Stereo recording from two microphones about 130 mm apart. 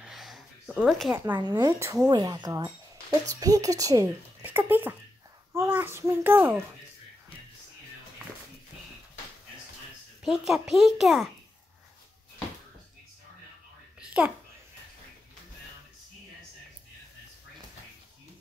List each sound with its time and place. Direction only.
0.0 s a sound: centre (ahead or behind)
1.1 s a child's voice: 20° right (ahead or behind)
1.4 s a child's voice: 30° right (ahead or behind)
4.5 s a child's voice: 15° right (ahead or behind)
10.2 s a child's voice: 5° right (ahead or behind)
13.9 s a sound: 5° right (ahead or behind)